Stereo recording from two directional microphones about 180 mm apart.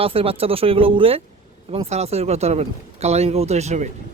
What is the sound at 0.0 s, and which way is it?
Speech, 30° right (ahead or behind).